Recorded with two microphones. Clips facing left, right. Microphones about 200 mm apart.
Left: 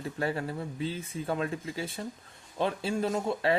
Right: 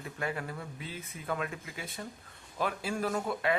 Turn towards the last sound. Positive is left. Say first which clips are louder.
# left 3 dB
turn(degrees=30)  # may be behind; listen again after turning